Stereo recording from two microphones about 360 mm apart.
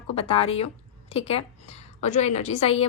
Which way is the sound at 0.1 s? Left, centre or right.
Centre.